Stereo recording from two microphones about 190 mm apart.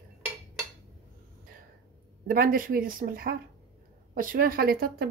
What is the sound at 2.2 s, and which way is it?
Speech, 50° right (ahead or behind).